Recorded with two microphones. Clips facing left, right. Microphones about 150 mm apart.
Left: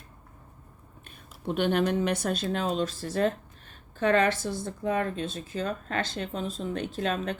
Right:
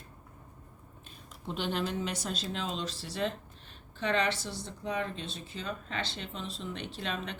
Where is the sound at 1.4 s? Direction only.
60° left (ahead or behind).